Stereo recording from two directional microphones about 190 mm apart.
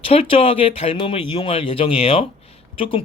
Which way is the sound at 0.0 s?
30° left (ahead or behind).